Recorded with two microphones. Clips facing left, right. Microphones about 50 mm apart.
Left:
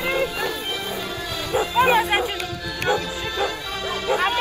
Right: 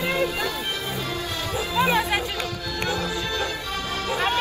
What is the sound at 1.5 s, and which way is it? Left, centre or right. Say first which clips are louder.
Bow-wow: left 5 dB; left.